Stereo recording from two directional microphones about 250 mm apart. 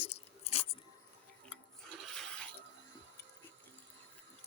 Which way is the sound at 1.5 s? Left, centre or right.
Centre.